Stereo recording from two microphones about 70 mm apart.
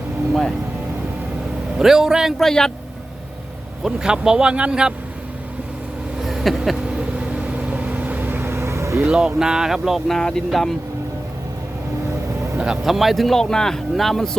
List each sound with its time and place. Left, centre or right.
1.8 s speech: centre
2.4 s speech: centre
3.8 s speech: centre
6.1 s a sound: centre
6.8 s vehicle: centre; by 9.0 s right
9.0 s speech: centre
10.2 s speech: centre
12.5 s speech: centre